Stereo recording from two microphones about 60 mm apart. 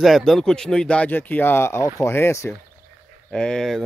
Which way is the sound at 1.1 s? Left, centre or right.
Left.